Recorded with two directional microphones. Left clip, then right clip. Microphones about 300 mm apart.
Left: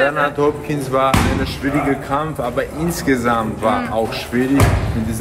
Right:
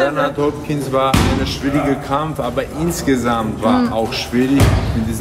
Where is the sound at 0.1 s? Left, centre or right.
Centre.